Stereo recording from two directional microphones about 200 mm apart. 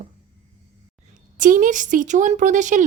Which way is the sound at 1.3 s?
40° right (ahead or behind).